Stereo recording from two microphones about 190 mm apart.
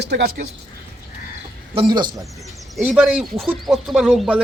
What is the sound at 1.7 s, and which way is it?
Speech, 25° right (ahead or behind).